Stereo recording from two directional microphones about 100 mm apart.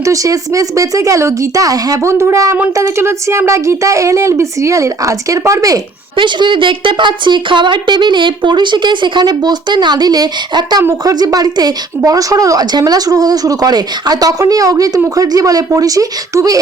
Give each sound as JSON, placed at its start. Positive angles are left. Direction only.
{"t": 0.0, "sound": "speech", "side_deg": -35}
{"t": 6.1, "sound": "speech", "side_deg": -50}